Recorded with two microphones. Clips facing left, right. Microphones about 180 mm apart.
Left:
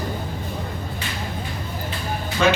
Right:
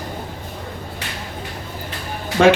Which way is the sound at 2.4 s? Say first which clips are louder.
Right 7 dB; 65° right (ahead or behind).